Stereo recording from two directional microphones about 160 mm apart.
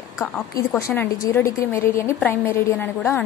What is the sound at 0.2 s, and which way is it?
A woman's voice, 20° left (ahead or behind).